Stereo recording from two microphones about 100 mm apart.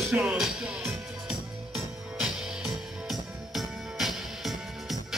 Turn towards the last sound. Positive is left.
turn(degrees=0)  # may be behind; listen again after turning